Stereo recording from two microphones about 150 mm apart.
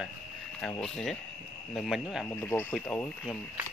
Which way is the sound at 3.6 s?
10° right (ahead or behind).